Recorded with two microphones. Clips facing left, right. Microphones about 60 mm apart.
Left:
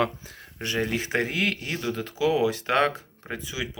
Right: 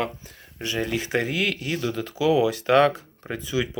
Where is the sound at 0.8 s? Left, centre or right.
Left.